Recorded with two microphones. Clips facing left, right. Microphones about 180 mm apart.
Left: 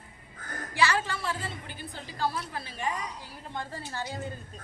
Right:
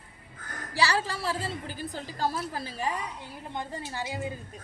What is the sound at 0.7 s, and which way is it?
A woman's voice, 35° right (ahead or behind).